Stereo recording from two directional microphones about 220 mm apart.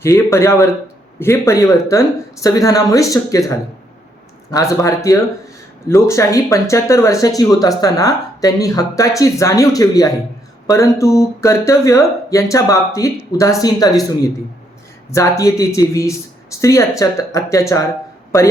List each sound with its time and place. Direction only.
0.0 s speech: 10° left (ahead or behind)
15.1 s speech: 15° left (ahead or behind)